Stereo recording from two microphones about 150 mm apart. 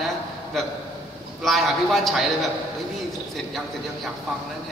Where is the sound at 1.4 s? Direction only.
Centre (ahead or behind).